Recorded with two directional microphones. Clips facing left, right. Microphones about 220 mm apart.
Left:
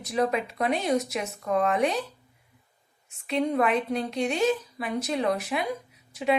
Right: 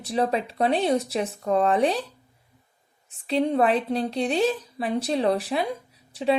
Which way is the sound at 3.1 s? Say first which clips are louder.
Right 3 dB; 30° right (ahead or behind).